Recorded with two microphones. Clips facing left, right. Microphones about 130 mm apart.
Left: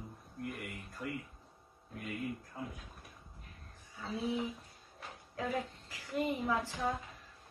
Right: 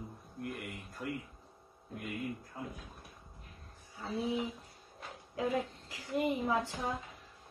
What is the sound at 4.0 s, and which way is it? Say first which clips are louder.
Speech: right 1 dB; 20° right (ahead or behind).